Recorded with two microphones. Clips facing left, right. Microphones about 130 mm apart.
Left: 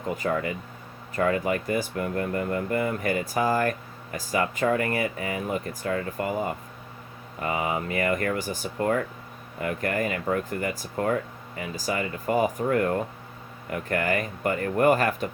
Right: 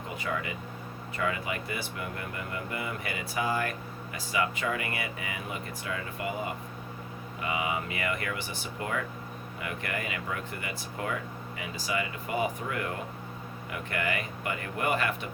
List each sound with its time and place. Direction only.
0.2 s speech: 45° left (ahead or behind)